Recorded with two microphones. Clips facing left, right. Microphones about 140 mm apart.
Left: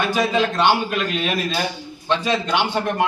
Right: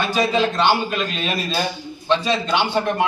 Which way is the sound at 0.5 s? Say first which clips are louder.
Even; 10° left (ahead or behind).